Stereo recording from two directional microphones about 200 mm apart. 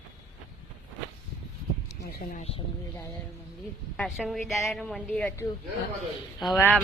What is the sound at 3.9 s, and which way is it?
A woman's voice, centre (ahead or behind).